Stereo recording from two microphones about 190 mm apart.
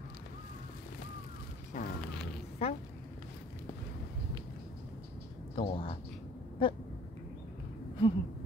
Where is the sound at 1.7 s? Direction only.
45° left (ahead or behind).